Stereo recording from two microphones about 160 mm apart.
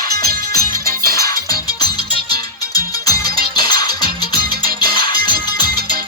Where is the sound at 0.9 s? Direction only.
20° left (ahead or behind).